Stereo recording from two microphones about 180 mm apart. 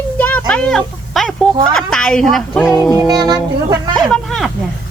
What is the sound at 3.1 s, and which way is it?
Speech, 20° right (ahead or behind).